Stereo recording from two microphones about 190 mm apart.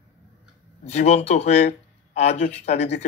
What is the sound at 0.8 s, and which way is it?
Speech, 35° left (ahead or behind).